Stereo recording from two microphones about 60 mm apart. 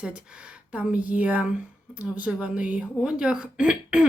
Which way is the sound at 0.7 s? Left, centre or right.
Right.